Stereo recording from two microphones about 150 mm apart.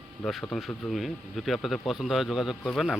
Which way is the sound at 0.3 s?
Centre (ahead or behind).